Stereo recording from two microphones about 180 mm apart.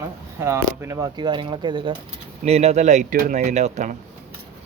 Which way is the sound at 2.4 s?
35° right (ahead or behind).